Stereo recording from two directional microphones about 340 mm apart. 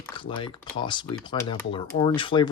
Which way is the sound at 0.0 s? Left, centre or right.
Centre.